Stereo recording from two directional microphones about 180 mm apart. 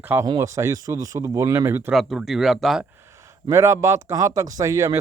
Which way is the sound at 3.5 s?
15° right (ahead or behind).